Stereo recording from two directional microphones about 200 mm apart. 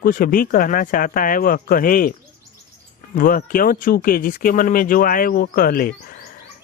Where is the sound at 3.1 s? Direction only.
45° left (ahead or behind).